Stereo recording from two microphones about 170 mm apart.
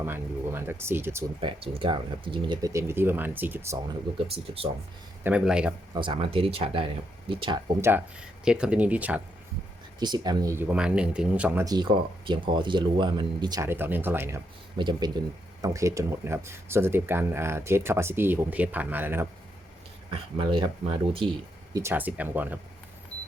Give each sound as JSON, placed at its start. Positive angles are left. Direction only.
{"t": 0.0, "sound": "speech", "side_deg": -15}
{"t": 1.4, "sound": "speech", "side_deg": -30}
{"t": 4.4, "sound": "speech", "side_deg": -35}
{"t": 5.2, "sound": "speech", "side_deg": -5}
{"t": 5.9, "sound": "speech", "side_deg": -30}
{"t": 8.4, "sound": "speech", "side_deg": -5}
{"t": 10.0, "sound": "speech", "side_deg": -25}
{"t": 11.6, "sound": "speech", "side_deg": -25}
{"t": 14.8, "sound": "speech", "side_deg": -25}
{"t": 20.1, "sound": "speech", "side_deg": -30}
{"t": 21.7, "sound": "speech", "side_deg": -15}